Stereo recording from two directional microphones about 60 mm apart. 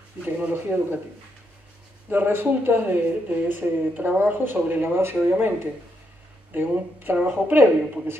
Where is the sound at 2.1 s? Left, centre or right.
Right.